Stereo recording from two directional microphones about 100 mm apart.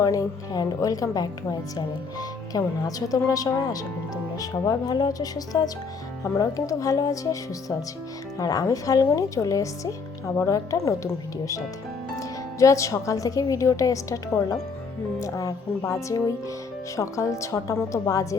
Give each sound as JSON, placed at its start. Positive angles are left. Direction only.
{"t": 0.0, "sound": "speech", "side_deg": 35}
{"t": 2.5, "sound": "speech", "side_deg": 35}
{"t": 8.4, "sound": "speech", "side_deg": 40}
{"t": 15.2, "sound": "speech", "side_deg": 35}